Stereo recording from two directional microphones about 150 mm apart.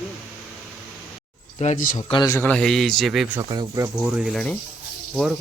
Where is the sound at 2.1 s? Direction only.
25° left (ahead or behind).